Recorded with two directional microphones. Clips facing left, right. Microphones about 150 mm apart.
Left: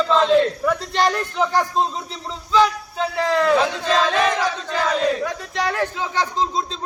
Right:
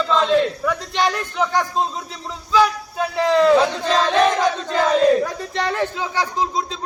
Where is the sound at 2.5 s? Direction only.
10° right (ahead or behind).